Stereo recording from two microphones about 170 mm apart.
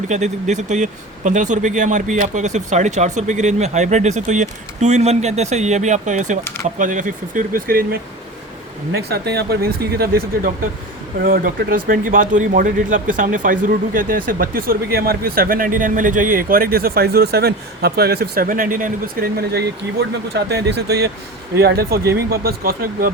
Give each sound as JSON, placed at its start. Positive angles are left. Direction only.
{"t": 0.1, "sound": "speech", "side_deg": -45}
{"t": 8.9, "sound": "speech", "side_deg": -70}